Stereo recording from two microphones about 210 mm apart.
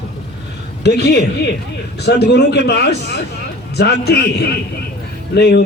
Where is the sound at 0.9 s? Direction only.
55° left (ahead or behind).